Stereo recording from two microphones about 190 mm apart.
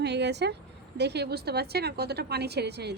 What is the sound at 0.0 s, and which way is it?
A woman's voice, 60° right (ahead or behind).